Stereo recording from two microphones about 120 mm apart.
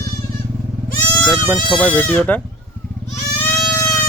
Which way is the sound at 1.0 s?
10° left (ahead or behind).